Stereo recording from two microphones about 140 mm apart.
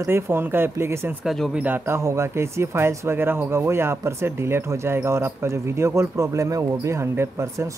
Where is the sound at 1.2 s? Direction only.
Centre (ahead or behind).